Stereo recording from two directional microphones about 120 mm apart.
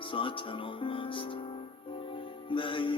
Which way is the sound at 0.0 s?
45° left (ahead or behind).